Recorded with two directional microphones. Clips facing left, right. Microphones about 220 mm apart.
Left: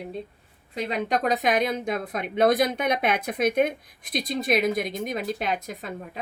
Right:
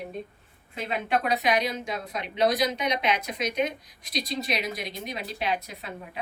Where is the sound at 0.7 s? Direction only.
40° left (ahead or behind).